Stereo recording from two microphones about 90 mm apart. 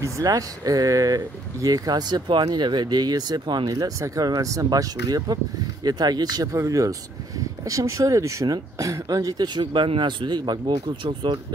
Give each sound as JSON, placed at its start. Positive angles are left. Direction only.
{"t": 0.2, "sound": "speech", "side_deg": -40}
{"t": 9.6, "sound": "speech", "side_deg": -75}